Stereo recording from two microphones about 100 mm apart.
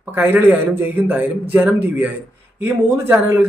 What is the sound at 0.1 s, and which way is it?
Speech, 20° right (ahead or behind).